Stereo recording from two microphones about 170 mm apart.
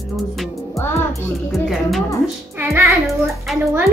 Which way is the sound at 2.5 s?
15° right (ahead or behind).